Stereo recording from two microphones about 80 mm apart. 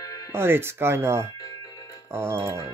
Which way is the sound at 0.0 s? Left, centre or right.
Left.